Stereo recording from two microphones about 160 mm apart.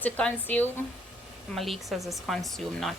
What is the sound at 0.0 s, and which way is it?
Speech, 10° left (ahead or behind).